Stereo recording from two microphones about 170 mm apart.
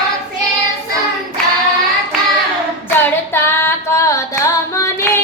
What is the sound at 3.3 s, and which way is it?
Female singing, 15° left (ahead or behind).